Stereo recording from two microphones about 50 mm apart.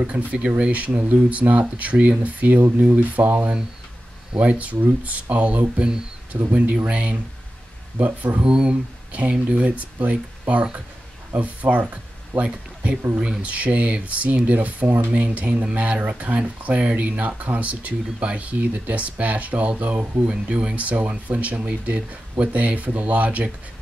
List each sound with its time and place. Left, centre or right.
0.0 s speech: right
5.8 s speech: centre
6.3 s speech: right
6.9 s speech: right
9.9 s speech: right
20.2 s speech: right